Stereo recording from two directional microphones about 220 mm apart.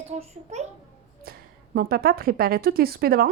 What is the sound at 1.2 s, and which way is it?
A woman's voice, 45° right (ahead or behind).